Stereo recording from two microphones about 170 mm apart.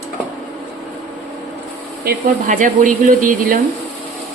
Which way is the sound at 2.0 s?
50° right (ahead or behind).